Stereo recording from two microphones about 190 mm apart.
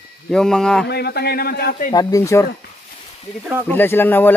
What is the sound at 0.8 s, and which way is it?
A man's voice, 60° left (ahead or behind).